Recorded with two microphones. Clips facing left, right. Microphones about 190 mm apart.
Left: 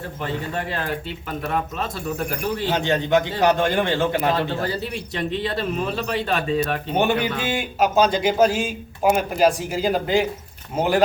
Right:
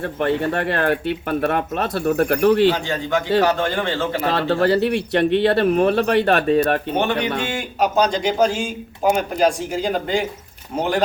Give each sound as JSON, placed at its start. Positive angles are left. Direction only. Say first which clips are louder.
{"t": 0.0, "sound": "speech", "louder": "right 8 dB", "side_deg": -65}
{"t": 2.6, "sound": "a man's voice", "louder": "right 2 dB", "side_deg": 20}
{"t": 4.4, "sound": "speech", "louder": "right 7 dB", "side_deg": -70}
{"t": 6.9, "sound": "a man's voice", "louder": "even", "side_deg": 10}